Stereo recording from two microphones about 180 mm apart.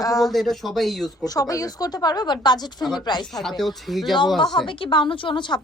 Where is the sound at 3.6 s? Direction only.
Centre (ahead or behind).